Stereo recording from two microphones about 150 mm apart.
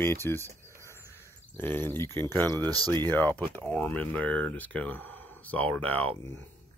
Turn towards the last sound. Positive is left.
turn(degrees=10)  # may be behind; listen again after turning